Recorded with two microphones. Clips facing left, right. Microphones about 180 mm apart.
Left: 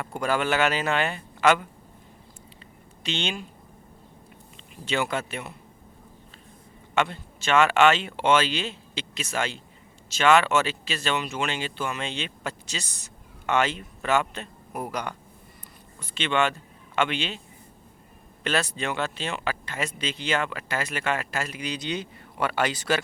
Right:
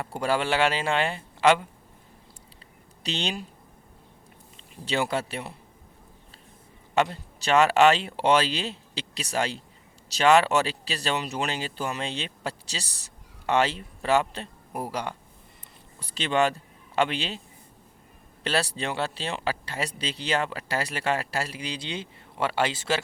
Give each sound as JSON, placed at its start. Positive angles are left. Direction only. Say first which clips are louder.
{"t": 0.0, "sound": "speech", "louder": "even", "side_deg": -30}
{"t": 3.0, "sound": "speech", "louder": "even", "side_deg": -35}
{"t": 4.9, "sound": "speech", "louder": "even", "side_deg": -35}
{"t": 6.9, "sound": "a man's voice", "louder": "right 1 dB", "side_deg": -35}
{"t": 18.4, "sound": "speech", "louder": "even", "side_deg": -35}